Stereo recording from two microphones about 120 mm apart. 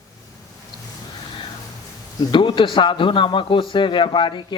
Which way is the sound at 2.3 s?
40° left (ahead or behind).